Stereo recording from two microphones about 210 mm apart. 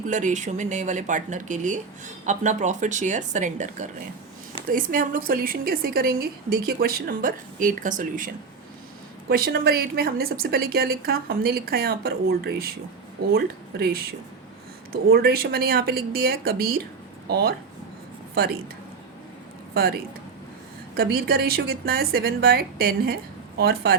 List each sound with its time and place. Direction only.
0.1 s a woman's voice: 35° right (ahead or behind)
9.3 s a woman's voice: 45° right (ahead or behind)
15.1 s a woman's voice: 45° right (ahead or behind)
19.7 s a woman's voice: 45° right (ahead or behind)